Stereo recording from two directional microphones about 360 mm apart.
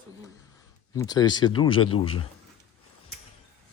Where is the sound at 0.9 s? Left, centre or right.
Centre.